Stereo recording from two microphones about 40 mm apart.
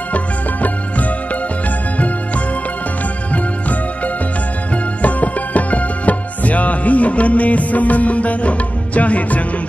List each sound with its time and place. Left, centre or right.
0.1 s music: left
3.3 s music: left